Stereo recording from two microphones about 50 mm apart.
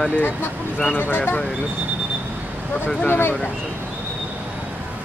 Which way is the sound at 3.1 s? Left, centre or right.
Left.